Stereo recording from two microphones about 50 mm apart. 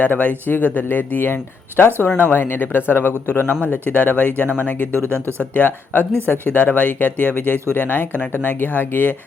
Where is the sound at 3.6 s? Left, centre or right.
Left.